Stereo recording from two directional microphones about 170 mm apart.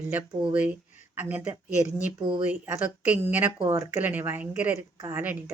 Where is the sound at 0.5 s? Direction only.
10° right (ahead or behind).